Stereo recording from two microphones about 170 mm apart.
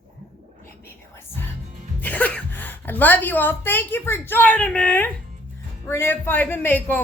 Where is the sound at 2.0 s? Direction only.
10° left (ahead or behind).